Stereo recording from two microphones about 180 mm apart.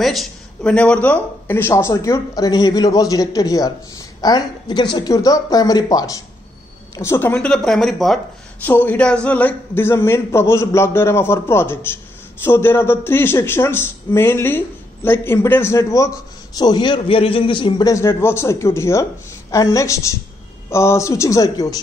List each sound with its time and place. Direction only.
0.0 s a man's voice: centre (ahead or behind); by 21.7 s 20° left (ahead or behind)